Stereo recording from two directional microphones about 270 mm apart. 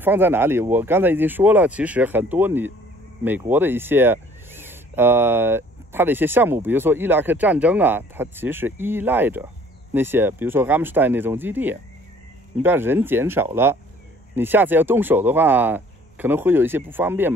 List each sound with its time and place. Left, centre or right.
0.0 s speech: centre